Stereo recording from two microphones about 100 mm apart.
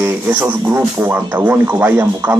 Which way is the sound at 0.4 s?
25° right (ahead or behind).